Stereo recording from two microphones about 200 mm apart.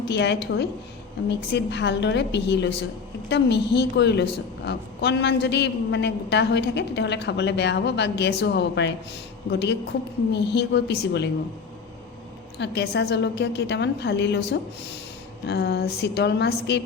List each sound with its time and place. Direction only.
0.1 s a woman's voice: 60° left (ahead or behind)
12.5 s a woman's voice: 55° left (ahead or behind)